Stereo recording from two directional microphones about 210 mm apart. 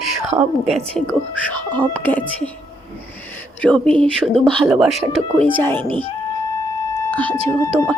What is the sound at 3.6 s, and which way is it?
Speech, 5° left (ahead or behind).